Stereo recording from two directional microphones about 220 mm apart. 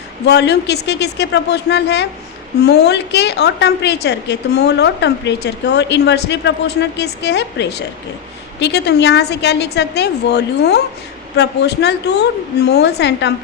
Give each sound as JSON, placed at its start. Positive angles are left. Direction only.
{"t": 0.3, "sound": "a woman's voice", "side_deg": 50}